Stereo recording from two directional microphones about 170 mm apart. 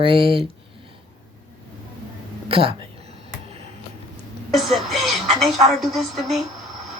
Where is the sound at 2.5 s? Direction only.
30° right (ahead or behind).